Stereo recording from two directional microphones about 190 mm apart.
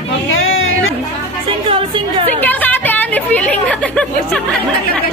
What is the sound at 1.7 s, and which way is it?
Music, 25° right (ahead or behind).